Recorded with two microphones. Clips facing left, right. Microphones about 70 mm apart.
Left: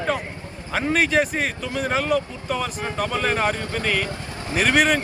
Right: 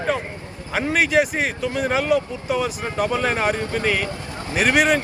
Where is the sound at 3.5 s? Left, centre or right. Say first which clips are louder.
Right 4 dB; right.